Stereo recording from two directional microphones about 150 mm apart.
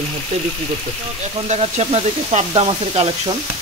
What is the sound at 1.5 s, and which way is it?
Speech, 45° right (ahead or behind).